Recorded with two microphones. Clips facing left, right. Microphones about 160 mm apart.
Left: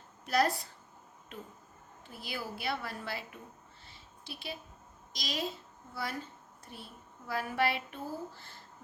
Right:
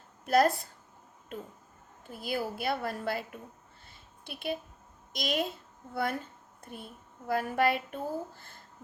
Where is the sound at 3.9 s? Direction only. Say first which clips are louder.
Right 2 dB; 55° right (ahead or behind).